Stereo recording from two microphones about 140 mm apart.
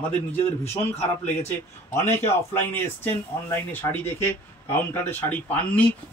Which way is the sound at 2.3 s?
15° left (ahead or behind).